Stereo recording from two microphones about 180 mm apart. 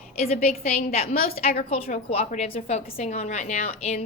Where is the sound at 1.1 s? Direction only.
55° left (ahead or behind).